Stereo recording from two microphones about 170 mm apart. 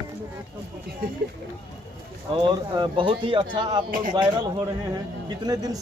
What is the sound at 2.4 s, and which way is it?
Speech, 25° right (ahead or behind).